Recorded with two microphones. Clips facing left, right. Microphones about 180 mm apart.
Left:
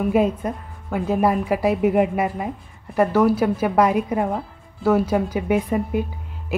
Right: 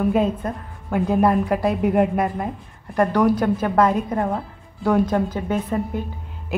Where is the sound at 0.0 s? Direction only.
10° left (ahead or behind).